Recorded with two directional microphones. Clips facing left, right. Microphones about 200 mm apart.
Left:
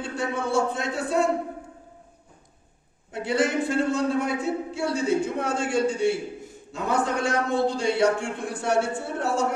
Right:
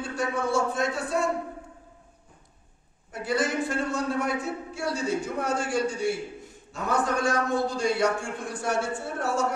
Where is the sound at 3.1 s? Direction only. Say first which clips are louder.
Left 3 dB; 30° left (ahead or behind).